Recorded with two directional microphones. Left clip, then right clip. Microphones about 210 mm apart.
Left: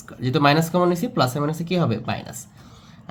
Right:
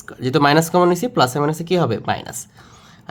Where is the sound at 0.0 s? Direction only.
40° right (ahead or behind).